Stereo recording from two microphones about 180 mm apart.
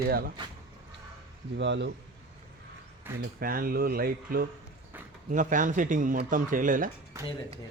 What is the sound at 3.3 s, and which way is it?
Speech, 55° right (ahead or behind).